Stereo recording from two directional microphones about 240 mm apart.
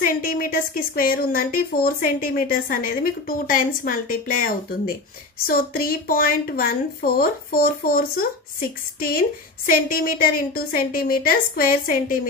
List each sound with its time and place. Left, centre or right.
0.0 s speech: left